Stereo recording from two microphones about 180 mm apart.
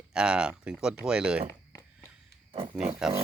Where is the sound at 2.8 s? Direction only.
5° right (ahead or behind).